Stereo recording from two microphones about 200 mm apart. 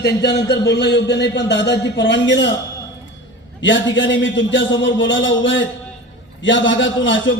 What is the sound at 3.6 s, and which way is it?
A man's voice, 65° left (ahead or behind).